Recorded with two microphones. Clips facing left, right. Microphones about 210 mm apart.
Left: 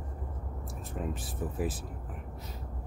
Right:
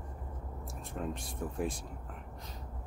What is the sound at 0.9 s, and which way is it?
Speech, 5° left (ahead or behind).